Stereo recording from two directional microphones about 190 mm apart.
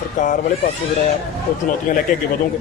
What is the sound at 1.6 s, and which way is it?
Speech, 45° left (ahead or behind).